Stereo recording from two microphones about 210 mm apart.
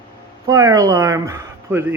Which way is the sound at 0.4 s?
15° right (ahead or behind).